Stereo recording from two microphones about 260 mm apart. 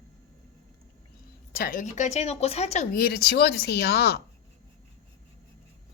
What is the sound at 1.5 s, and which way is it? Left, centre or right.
A woman's voice, left.